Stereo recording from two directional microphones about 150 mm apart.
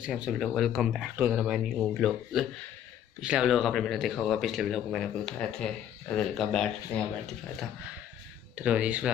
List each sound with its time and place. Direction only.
0.0 s speech: 5° right (ahead or behind)
1.1 s speech: 10° right (ahead or behind)
8.5 s speech: 10° right (ahead or behind)